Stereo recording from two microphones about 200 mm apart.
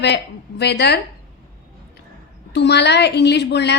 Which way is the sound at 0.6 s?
55° left (ahead or behind).